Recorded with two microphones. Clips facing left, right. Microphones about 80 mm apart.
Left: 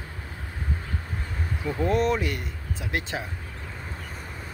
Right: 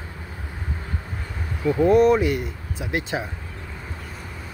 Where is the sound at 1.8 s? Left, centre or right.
Centre.